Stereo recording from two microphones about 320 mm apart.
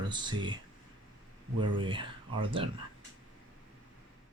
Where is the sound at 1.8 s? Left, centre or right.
Centre.